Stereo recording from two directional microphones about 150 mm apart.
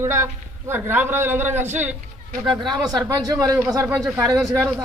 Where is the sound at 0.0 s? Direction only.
15° right (ahead or behind).